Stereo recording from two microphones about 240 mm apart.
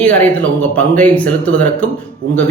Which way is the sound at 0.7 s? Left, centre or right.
Centre.